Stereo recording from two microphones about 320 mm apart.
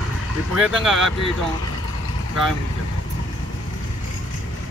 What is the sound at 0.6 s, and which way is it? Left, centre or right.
Speech, centre.